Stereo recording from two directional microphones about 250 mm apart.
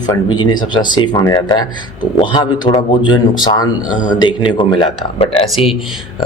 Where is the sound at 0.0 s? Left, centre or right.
Centre.